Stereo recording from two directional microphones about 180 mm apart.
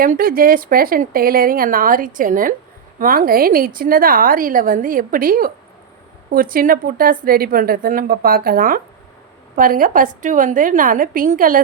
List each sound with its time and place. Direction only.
0.0 s a woman's voice: 50° right (ahead or behind)